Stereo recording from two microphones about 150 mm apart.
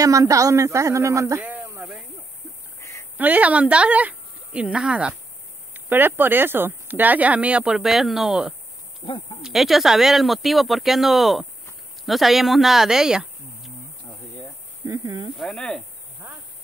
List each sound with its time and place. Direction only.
0.0 s speech: 20° right (ahead or behind)
1.4 s a sound: 10° right (ahead or behind)
2.8 s a sound: 20° left (ahead or behind)
3.2 s speech: 10° right (ahead or behind)
9.0 s speech: 35° left (ahead or behind)
9.4 s speech: centre (ahead or behind)
14.9 s speech: 30° right (ahead or behind)
15.3 s speech: centre (ahead or behind)